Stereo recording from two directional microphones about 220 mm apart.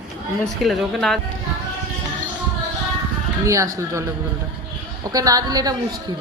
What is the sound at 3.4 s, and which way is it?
Speech, 15° right (ahead or behind).